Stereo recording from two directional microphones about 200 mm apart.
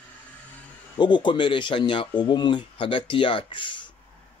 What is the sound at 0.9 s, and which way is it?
Speech, 25° left (ahead or behind).